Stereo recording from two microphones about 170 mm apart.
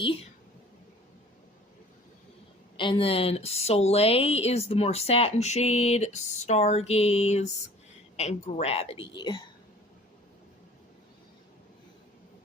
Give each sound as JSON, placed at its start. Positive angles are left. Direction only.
{"t": 0.0, "sound": "speech", "side_deg": 30}
{"t": 2.7, "sound": "speech", "side_deg": 30}